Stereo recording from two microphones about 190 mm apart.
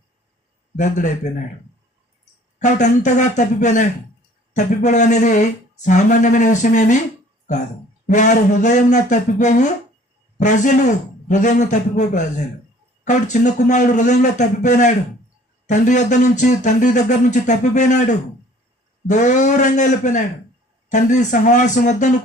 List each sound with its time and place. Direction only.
0.8 s speech: 40° left (ahead or behind)
2.6 s speech: 40° left (ahead or behind)
8.0 s speech: 40° left (ahead or behind)